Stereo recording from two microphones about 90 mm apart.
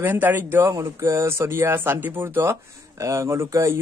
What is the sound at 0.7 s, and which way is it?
Speech, 35° right (ahead or behind).